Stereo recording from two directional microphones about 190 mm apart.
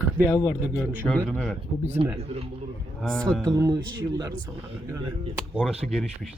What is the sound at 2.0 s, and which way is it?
Speech, 30° right (ahead or behind).